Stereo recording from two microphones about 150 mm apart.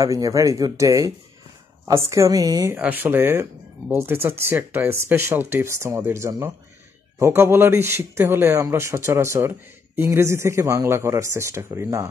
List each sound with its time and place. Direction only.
0.0 s speech: 20° right (ahead or behind)
2.8 s speech: 10° right (ahead or behind)